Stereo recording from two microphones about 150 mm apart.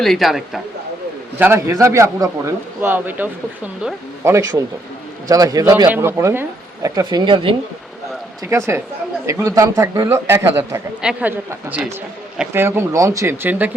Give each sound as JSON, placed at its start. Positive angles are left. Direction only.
{"t": 0.0, "sound": "a man's voice", "side_deg": 0}
{"t": 1.4, "sound": "speech", "side_deg": -15}
{"t": 8.4, "sound": "speech", "side_deg": -20}